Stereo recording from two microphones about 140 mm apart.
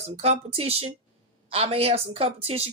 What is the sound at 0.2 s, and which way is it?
Speech, 45° right (ahead or behind).